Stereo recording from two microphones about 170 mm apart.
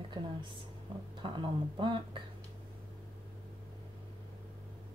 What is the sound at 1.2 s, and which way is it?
Speech, 30° right (ahead or behind).